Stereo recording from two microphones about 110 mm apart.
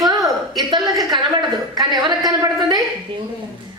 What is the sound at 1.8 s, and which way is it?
Speech, 40° right (ahead or behind).